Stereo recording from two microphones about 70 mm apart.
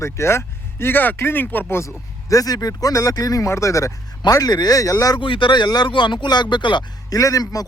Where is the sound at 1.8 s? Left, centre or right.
Left.